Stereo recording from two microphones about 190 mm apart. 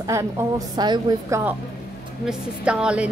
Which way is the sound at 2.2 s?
5° right (ahead or behind).